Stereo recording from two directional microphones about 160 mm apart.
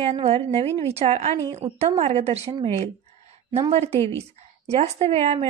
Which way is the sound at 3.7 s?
40° right (ahead or behind).